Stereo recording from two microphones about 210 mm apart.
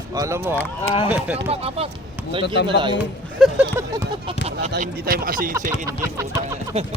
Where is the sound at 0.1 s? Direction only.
15° right (ahead or behind).